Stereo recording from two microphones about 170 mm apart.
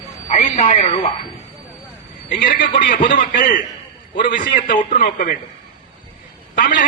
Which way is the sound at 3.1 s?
55° left (ahead or behind).